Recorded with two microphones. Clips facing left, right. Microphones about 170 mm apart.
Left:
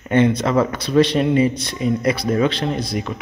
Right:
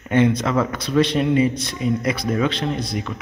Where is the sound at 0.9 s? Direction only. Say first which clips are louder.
Left 2 dB; centre (ahead or behind).